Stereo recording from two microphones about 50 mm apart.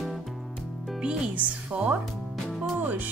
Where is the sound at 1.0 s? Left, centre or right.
Right.